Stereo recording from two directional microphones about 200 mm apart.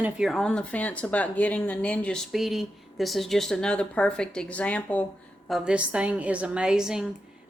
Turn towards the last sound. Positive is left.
turn(degrees=-5)  # may be behind; listen again after turning